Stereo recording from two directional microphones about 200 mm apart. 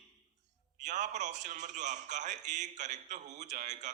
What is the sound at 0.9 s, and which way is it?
A man's voice, 35° right (ahead or behind).